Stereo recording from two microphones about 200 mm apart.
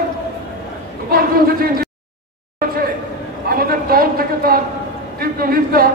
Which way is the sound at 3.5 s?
50° right (ahead or behind).